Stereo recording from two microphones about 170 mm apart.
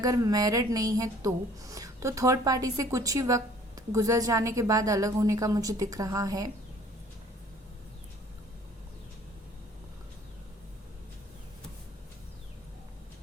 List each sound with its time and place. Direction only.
0.0 s a woman's voice: 20° right (ahead or behind)